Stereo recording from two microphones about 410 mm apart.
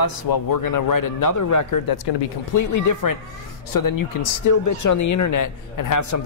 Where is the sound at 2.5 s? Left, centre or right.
Left.